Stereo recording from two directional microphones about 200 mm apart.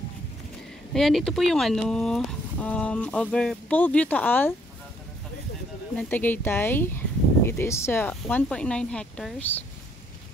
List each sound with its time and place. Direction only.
0.9 s speech: centre (ahead or behind)
5.9 s speech: 10° left (ahead or behind)